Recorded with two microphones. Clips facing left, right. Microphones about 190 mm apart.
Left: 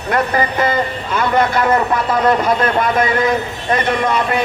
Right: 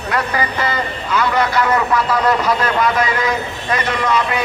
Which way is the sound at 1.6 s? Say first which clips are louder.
Left 1 dB; 30° left (ahead or behind).